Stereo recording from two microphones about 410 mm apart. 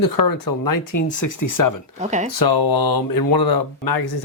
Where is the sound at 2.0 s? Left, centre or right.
Centre.